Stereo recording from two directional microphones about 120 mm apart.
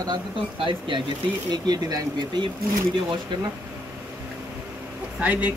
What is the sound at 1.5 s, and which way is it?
Speech, 35° right (ahead or behind).